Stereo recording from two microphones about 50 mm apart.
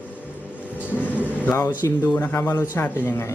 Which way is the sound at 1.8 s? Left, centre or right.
Left.